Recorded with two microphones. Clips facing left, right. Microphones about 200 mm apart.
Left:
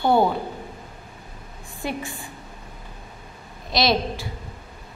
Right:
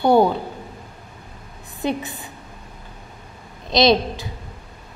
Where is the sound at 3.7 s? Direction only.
20° right (ahead or behind).